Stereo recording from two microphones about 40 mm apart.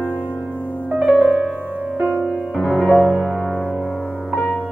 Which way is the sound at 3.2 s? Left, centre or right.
Left.